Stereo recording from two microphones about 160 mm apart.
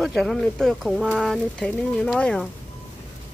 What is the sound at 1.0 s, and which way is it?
Speech, 10° right (ahead or behind).